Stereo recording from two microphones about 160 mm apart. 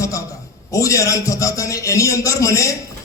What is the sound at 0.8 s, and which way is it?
A man's voice, 20° left (ahead or behind).